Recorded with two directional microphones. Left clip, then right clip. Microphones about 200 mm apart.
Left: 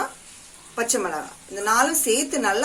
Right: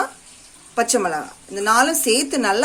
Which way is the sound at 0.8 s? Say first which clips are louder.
Right 5 dB; 50° right (ahead or behind).